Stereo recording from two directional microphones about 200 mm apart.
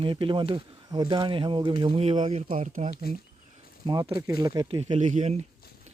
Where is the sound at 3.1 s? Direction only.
50° left (ahead or behind).